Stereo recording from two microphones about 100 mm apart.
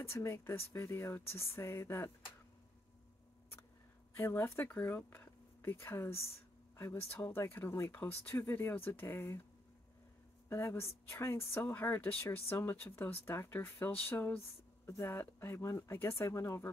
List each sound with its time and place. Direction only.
0.0 s speech: 25° left (ahead or behind)
4.2 s speech: 20° left (ahead or behind)
10.5 s speech: 25° left (ahead or behind)